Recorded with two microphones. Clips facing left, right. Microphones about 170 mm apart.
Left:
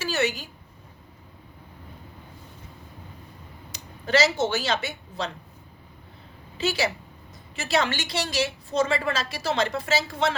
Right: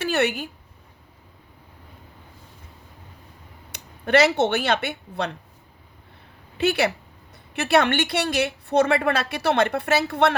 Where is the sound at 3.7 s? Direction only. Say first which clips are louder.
Right 4 dB; 60° right (ahead or behind).